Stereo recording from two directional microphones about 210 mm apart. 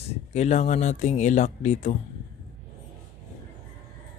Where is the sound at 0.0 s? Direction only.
30° left (ahead or behind).